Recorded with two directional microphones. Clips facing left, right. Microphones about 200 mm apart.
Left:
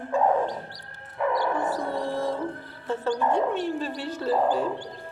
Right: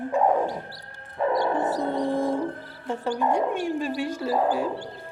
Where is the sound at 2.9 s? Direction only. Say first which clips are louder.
Even; 15° right (ahead or behind).